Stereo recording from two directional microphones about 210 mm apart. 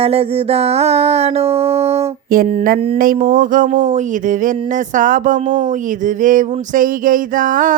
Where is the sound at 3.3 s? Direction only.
40° right (ahead or behind).